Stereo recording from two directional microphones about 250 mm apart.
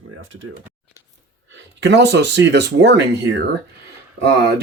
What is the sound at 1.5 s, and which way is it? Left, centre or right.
Speech, right.